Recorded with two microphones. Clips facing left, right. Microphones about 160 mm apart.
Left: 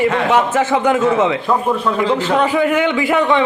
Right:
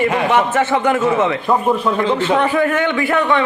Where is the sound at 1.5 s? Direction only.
10° right (ahead or behind).